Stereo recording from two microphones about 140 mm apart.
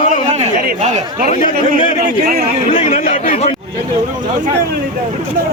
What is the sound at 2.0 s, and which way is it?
Speech, 90° right.